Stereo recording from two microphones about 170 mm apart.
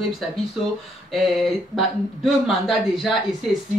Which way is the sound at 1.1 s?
Centre (ahead or behind).